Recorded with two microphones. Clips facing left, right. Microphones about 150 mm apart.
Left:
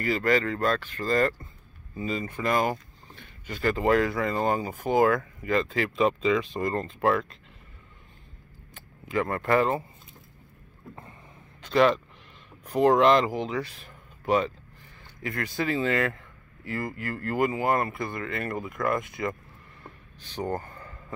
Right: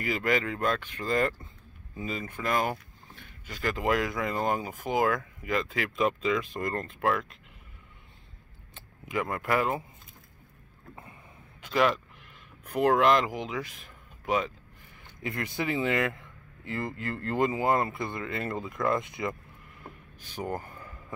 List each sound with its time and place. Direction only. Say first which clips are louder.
0.0 s speech: left 4 dB; 10° right (ahead or behind)
2.2 s speech: left 3 dB; 5° left (ahead or behind)
8.7 s speech: left 4 dB; 15° right (ahead or behind)
11.6 s speech: left 4 dB; 5° right (ahead or behind)
15.2 s speech: left 2 dB; 20° right (ahead or behind)
19.8 s gasp: right 2 dB; 5° right (ahead or behind)